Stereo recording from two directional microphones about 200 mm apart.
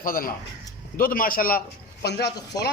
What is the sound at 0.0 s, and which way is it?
A man's voice, 45° left (ahead or behind).